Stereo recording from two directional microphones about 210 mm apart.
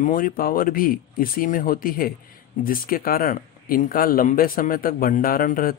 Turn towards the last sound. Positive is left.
turn(degrees=40)  # may be behind; listen again after turning